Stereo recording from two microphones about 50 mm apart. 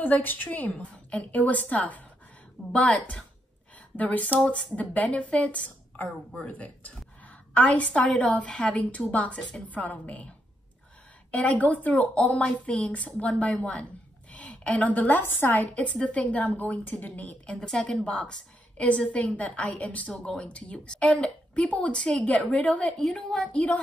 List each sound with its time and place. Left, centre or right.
0.0 s a woman's voice: left
11.3 s a woman's voice: left
17.6 s a woman's voice: centre; by 22.9 s left
22.9 s a woman's voice: centre
23.4 s a woman's voice: left